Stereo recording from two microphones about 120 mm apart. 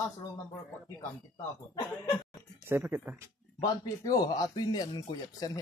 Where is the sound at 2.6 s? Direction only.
15° right (ahead or behind).